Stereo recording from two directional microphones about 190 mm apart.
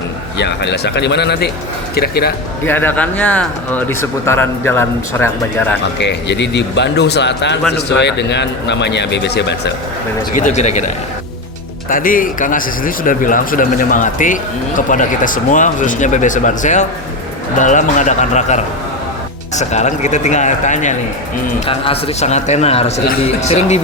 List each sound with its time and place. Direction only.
0.3 s a man's voice: 65° left (ahead or behind)
2.6 s speech: 10° left (ahead or behind)
6.0 s a man's voice: 65° left (ahead or behind)
10.3 s speech: 40° left (ahead or behind)
11.9 s speech: 45° left (ahead or behind)